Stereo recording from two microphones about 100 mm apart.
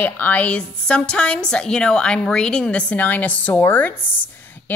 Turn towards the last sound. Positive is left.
turn(degrees=20)  # may be behind; listen again after turning